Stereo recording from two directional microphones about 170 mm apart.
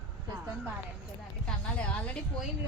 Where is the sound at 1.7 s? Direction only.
5° left (ahead or behind).